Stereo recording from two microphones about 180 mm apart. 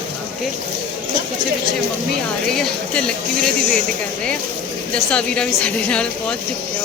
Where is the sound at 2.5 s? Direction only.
5° left (ahead or behind).